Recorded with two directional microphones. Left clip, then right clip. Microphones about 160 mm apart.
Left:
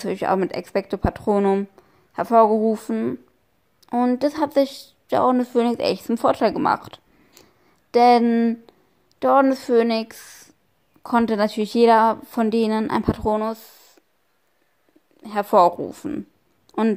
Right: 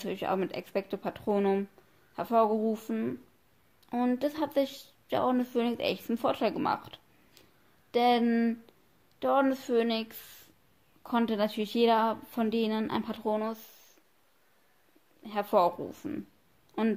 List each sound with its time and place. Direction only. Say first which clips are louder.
0.0 s a woman's voice: left 10 dB; 40° left (ahead or behind)
15.2 s a woman's voice: left 10 dB; 40° left (ahead or behind)
16.7 s a sound: left 10 dB; 40° left (ahead or behind)